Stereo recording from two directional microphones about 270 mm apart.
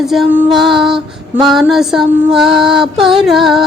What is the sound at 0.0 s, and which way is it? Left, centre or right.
Female singing, centre.